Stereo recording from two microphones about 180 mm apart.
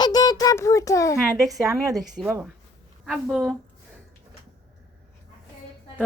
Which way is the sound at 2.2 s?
25° right (ahead or behind).